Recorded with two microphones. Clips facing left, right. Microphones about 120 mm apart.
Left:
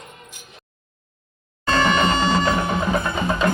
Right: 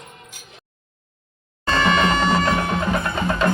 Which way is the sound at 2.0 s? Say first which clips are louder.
Even; 30° left (ahead or behind).